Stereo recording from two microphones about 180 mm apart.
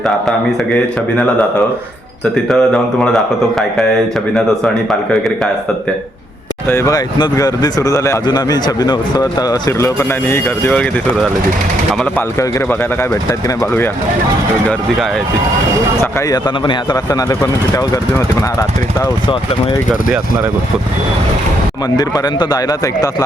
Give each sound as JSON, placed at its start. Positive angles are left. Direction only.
{"t": 2.3, "sound": "speech", "side_deg": 5}
{"t": 4.4, "sound": "speech", "side_deg": 5}
{"t": 6.7, "sound": "speech", "side_deg": 15}
{"t": 12.4, "sound": "a man's voice", "side_deg": 15}
{"t": 16.3, "sound": "speech", "side_deg": 20}
{"t": 21.9, "sound": "speech", "side_deg": 20}